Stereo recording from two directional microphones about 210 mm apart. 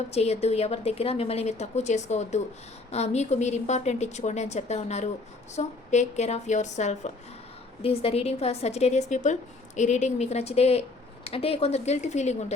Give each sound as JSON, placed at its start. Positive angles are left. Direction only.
{"t": 0.1, "sound": "a woman's voice", "side_deg": 30}